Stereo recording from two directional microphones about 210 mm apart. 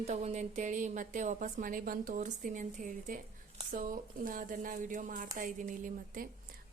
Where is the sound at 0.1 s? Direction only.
35° right (ahead or behind).